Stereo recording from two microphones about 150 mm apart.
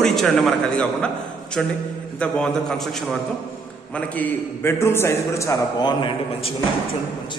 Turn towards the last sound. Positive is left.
turn(degrees=30)  # may be behind; listen again after turning